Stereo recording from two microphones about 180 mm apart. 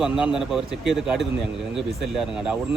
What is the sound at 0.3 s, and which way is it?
Speech, centre (ahead or behind).